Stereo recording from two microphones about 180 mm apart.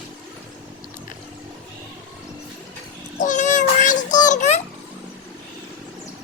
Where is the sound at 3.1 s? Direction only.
45° left (ahead or behind).